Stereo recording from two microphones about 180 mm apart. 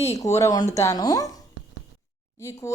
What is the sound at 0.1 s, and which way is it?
A woman's voice, 15° left (ahead or behind).